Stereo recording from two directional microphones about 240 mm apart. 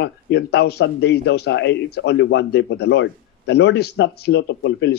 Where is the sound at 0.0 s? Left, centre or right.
Left.